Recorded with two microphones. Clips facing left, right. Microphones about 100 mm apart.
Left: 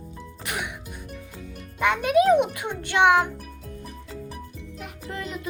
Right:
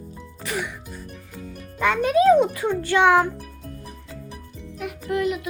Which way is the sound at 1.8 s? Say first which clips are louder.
Right 2 dB; 15° left (ahead or behind).